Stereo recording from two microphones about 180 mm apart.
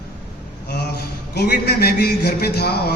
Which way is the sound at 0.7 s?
60° left (ahead or behind).